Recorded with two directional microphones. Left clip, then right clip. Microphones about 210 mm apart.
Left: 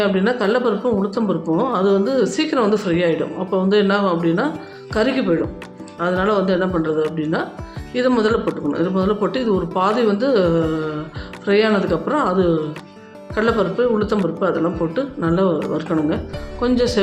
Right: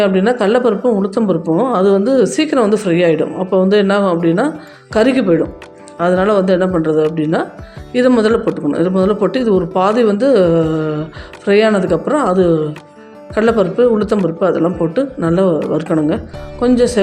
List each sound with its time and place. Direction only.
0.0 s speech: 25° right (ahead or behind)